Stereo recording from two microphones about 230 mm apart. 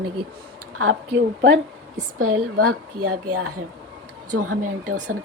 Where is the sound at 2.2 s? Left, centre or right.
Right.